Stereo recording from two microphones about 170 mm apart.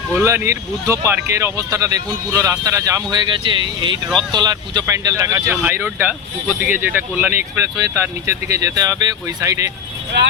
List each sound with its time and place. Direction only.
0.1 s speech: 15° right (ahead or behind)
4.1 s speech: 5° left (ahead or behind)
4.4 s speech: 25° right (ahead or behind)